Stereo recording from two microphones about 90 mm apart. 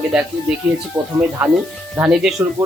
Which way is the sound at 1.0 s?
55° right (ahead or behind).